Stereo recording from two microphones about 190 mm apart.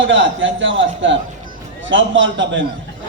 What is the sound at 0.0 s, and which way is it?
A man's voice, 75° right (ahead or behind).